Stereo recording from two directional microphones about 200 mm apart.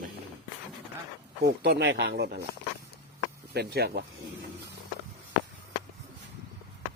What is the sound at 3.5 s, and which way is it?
Speech, 55° right (ahead or behind).